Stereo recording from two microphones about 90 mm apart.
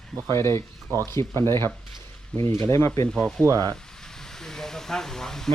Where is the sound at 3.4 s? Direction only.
40° right (ahead or behind).